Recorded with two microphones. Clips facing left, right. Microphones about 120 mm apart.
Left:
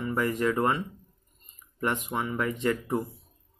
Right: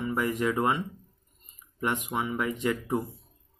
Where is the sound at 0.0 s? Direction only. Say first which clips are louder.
Left 1 dB; 15° right (ahead or behind).